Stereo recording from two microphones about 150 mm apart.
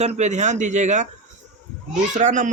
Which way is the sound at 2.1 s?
55° right (ahead or behind).